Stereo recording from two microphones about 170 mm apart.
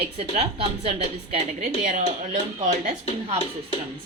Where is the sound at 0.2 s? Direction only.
35° right (ahead or behind).